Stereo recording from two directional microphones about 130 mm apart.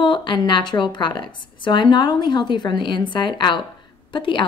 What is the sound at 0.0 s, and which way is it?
A woman's voice, 40° left (ahead or behind).